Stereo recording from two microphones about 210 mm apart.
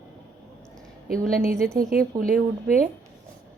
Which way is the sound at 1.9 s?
45° right (ahead or behind).